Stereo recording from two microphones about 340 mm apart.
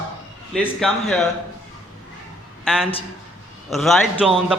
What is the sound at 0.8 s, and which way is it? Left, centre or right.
Speech, centre.